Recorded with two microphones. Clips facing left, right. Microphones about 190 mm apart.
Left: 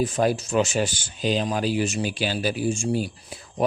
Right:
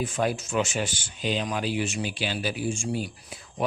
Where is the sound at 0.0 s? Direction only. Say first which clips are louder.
Left 5 dB; 40° left (ahead or behind).